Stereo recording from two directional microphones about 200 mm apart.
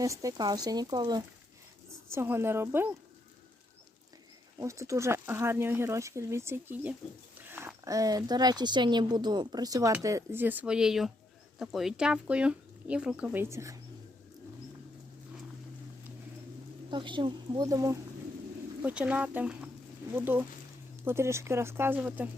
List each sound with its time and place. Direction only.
0.0 s speech: 15° right (ahead or behind)
4.6 s speech: 15° right (ahead or behind)
16.9 s speech: 25° right (ahead or behind); by 22.3 s 10° right (ahead or behind)